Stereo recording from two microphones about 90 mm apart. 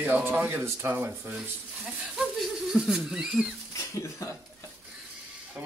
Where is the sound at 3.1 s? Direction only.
5° right (ahead or behind).